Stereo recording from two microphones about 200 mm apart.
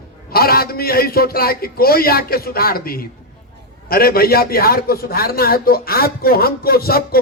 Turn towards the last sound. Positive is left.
turn(degrees=50)  # may be behind; listen again after turning